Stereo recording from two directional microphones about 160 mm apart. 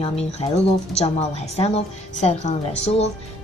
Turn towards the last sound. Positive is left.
turn(degrees=40)  # may be behind; listen again after turning